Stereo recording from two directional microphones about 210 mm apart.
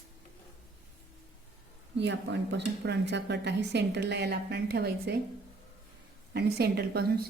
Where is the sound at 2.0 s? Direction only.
55° right (ahead or behind).